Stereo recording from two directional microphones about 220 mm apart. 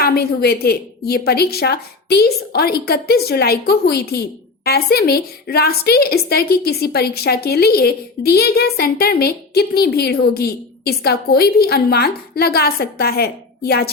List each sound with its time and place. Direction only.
0.0 s a woman's voice: 45° left (ahead or behind)